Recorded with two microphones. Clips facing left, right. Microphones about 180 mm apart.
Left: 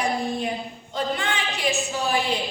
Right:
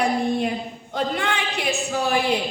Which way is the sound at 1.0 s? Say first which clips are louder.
Right 2 dB; 60° right (ahead or behind).